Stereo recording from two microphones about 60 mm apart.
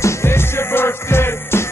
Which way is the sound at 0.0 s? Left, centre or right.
Left.